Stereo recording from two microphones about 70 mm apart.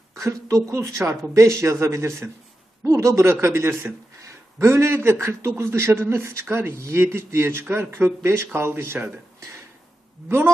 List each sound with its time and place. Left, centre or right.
0.1 s a woman's voice: right
4.2 s a sound: right
5.2 s speech: right